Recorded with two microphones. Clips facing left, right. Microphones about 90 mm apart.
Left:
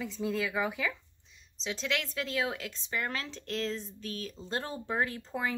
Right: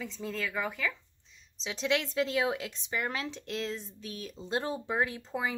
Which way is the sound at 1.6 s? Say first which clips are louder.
Right 3 dB; 15° right (ahead or behind).